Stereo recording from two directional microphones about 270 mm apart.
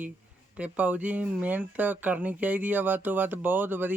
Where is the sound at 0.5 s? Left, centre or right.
Centre.